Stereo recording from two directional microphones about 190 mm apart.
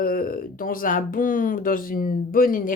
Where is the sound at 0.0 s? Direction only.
50° left (ahead or behind).